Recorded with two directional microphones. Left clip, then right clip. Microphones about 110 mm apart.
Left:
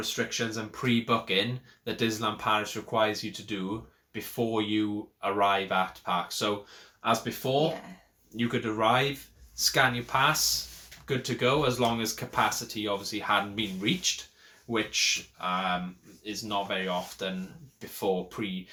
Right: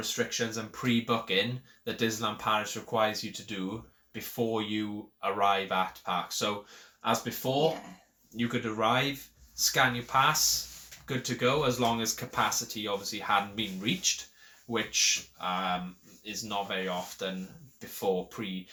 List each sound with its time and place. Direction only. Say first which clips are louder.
0.0 s speech: left 1 dB; 30° left (ahead or behind)